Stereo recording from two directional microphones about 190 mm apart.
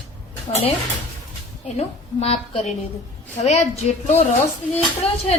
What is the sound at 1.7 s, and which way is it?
A woman's voice, 35° left (ahead or behind).